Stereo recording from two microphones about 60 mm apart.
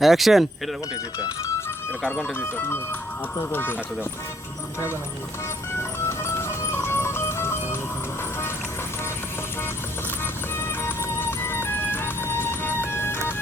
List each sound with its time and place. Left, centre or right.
0.0 s speech: centre
2.0 s speech: centre
2.4 s speech: left
6.1 s music: left
10.6 s music: left